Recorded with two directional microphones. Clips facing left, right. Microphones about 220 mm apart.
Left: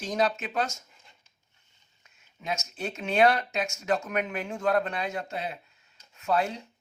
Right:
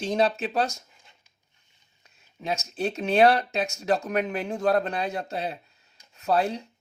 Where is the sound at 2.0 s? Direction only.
35° right (ahead or behind).